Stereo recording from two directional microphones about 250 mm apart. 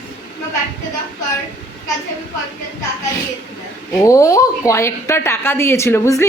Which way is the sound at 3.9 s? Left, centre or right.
Centre.